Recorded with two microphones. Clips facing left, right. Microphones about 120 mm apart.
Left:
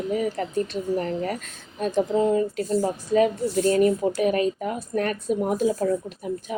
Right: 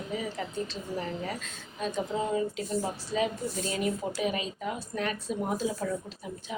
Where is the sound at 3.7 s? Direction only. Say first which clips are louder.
Left 12 dB; 45° left (ahead or behind).